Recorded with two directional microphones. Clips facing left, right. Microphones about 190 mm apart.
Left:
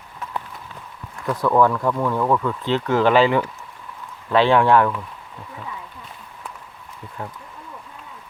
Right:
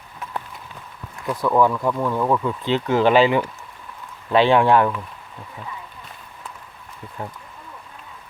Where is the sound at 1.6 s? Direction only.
10° right (ahead or behind).